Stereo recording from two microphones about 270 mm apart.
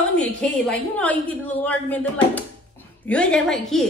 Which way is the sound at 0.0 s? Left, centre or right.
Centre.